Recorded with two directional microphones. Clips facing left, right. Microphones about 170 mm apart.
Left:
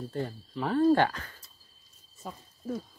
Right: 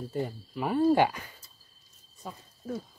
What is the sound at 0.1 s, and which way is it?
Speech, 10° right (ahead or behind).